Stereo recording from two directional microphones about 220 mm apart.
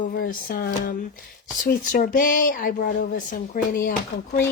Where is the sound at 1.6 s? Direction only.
40° left (ahead or behind).